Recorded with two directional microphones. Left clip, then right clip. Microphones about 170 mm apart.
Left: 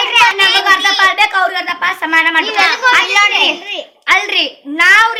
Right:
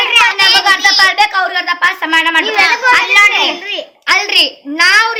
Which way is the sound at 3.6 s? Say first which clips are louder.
Right 2 dB; 30° left (ahead or behind).